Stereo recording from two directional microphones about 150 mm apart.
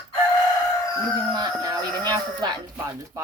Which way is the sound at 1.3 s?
25° right (ahead or behind).